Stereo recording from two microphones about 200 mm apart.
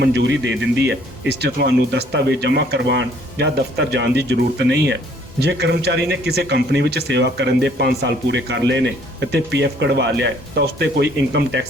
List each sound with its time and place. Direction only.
0.0 s speech: 60° right (ahead or behind)